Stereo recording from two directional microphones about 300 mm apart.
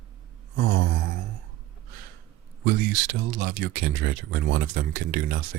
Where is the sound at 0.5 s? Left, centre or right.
Right.